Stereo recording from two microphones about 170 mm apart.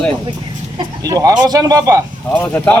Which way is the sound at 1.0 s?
20° right (ahead or behind).